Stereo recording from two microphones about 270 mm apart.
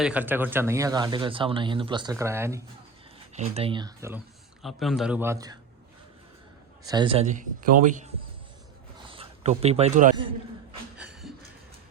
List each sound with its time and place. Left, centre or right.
0.0 s speech: centre
3.3 s speech: right
4.6 s a man's voice: centre
6.8 s speech: centre
9.0 s a sound: right
10.9 s a sound: centre